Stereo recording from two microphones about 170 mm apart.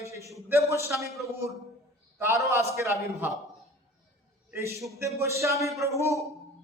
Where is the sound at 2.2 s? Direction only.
15° right (ahead or behind).